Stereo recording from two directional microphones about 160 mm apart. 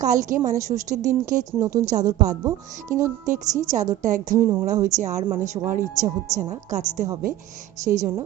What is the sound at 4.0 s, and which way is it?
Speech, 55° right (ahead or behind).